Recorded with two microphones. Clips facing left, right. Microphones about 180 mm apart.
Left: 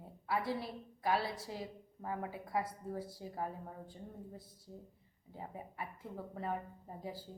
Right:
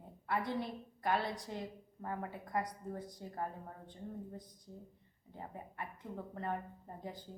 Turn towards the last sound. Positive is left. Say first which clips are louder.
# left 1 dB
turn(degrees=5)  # may be behind; listen again after turning